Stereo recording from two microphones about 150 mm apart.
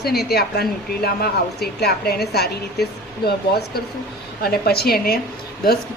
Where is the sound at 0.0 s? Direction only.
90° left.